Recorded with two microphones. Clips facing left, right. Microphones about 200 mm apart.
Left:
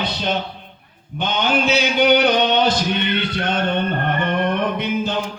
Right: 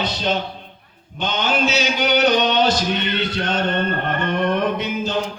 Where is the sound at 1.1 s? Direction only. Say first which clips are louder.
Left 2 dB; 55° left (ahead or behind).